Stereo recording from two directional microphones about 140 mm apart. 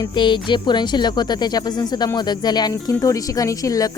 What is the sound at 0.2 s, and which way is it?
Speech, 35° left (ahead or behind).